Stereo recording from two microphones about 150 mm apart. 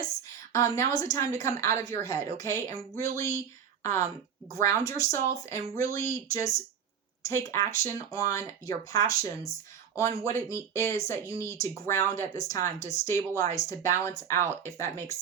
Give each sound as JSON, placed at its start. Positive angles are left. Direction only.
{"t": 0.5, "sound": "speech", "side_deg": 20}
{"t": 4.5, "sound": "speech", "side_deg": 20}